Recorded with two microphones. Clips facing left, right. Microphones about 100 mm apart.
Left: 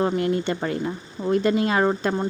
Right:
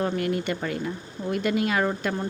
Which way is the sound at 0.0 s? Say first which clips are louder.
Left 4 dB; 25° left (ahead or behind).